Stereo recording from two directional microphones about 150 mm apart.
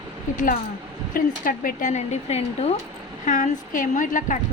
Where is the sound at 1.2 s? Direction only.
65° left (ahead or behind); by 2.8 s 45° left (ahead or behind).